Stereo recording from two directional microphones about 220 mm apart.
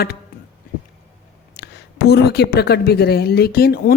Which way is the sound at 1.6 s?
45° left (ahead or behind).